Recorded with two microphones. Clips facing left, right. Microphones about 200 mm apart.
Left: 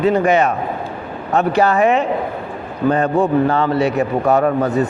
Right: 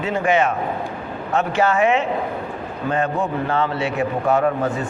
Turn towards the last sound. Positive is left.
turn(degrees=40)  # may be behind; listen again after turning